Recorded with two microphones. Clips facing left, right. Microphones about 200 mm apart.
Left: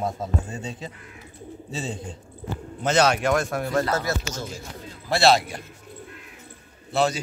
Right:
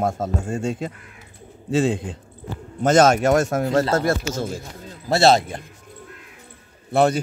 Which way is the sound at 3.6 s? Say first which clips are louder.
Right 5 dB; 25° right (ahead or behind).